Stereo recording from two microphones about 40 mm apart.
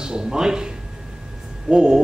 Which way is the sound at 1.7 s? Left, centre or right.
Centre.